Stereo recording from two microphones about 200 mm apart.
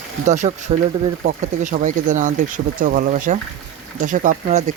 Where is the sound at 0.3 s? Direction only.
35° right (ahead or behind).